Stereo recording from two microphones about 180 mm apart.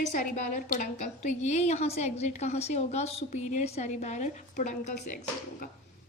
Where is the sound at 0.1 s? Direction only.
45° left (ahead or behind).